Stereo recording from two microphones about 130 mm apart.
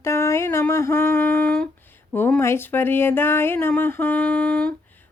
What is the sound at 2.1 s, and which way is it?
Speech, 15° left (ahead or behind).